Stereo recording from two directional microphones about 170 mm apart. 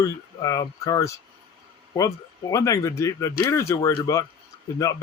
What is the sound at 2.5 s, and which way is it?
Speech, 20° left (ahead or behind).